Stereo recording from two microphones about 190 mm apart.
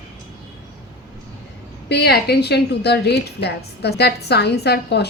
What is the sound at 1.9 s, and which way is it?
A woman's voice, 60° left (ahead or behind).